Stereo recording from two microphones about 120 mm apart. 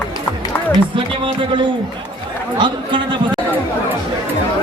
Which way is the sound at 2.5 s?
40° right (ahead or behind).